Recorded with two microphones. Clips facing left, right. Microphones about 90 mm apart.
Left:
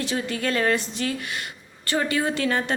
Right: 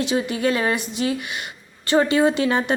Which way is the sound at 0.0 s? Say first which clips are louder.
Right 5 dB; 20° right (ahead or behind).